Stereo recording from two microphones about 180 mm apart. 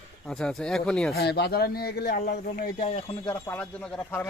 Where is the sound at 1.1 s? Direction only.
65° left (ahead or behind).